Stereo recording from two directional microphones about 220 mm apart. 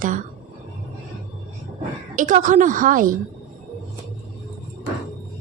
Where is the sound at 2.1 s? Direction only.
35° right (ahead or behind).